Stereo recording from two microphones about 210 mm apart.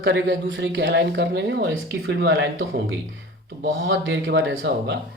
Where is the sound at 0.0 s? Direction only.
55° right (ahead or behind).